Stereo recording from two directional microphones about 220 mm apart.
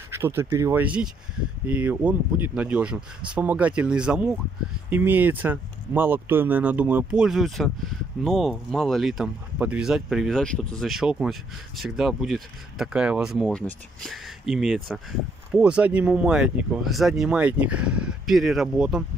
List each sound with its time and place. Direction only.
0.1 s speech: 10° right (ahead or behind)